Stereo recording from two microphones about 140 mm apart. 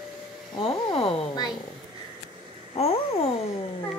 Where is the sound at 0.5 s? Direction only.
40° left (ahead or behind).